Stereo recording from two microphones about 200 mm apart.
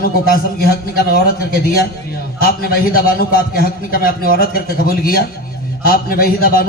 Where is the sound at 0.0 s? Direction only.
50° left (ahead or behind).